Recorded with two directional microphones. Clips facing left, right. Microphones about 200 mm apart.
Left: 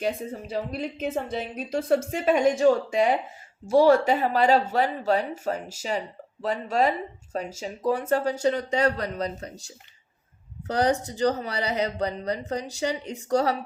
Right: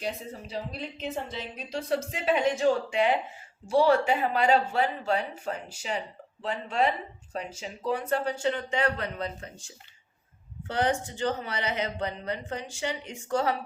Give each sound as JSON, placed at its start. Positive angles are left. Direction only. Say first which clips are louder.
{"t": 0.0, "sound": "speech", "louder": "left 6 dB", "side_deg": 50}